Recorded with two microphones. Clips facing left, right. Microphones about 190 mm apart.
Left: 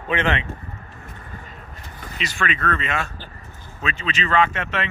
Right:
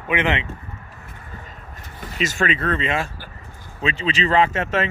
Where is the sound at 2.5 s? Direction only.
30° right (ahead or behind).